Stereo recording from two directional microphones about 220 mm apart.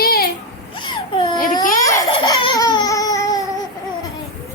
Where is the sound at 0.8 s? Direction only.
20° left (ahead or behind).